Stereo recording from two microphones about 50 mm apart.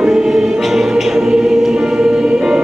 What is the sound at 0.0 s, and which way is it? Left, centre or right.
Choir, centre.